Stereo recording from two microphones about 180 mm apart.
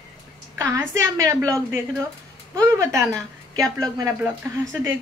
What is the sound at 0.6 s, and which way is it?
Speech, 15° right (ahead or behind).